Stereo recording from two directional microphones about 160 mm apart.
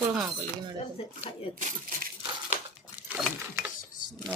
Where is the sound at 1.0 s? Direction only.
35° left (ahead or behind).